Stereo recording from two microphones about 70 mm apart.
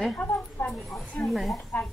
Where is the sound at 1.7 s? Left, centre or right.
Left.